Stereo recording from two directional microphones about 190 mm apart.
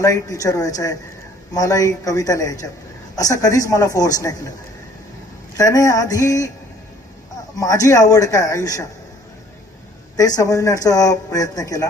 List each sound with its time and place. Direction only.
0.0 s a man's voice: 15° left (ahead or behind)
5.5 s a man's voice: 20° left (ahead or behind)
7.5 s a man's voice: 20° left (ahead or behind)
10.2 s speech: 20° left (ahead or behind)